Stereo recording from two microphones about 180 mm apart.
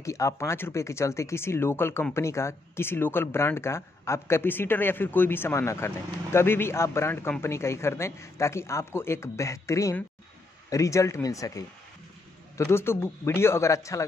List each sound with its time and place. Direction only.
0.0 s speech: 15° left (ahead or behind)